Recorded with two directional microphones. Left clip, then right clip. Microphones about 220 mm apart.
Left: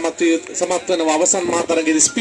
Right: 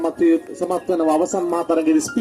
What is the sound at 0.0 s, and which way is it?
Speech, 55° right (ahead or behind).